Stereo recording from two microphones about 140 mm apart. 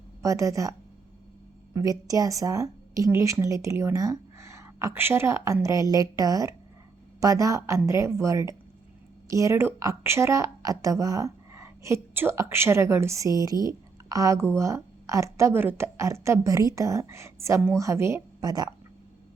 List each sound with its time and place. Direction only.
0.2 s speech: 25° right (ahead or behind)
1.7 s a woman's voice: 25° right (ahead or behind)